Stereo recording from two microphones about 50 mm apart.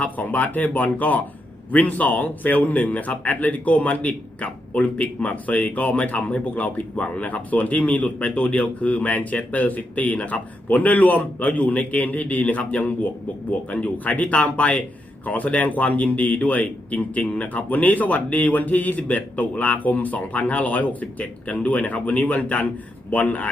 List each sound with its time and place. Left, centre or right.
0.0 s a man's voice: left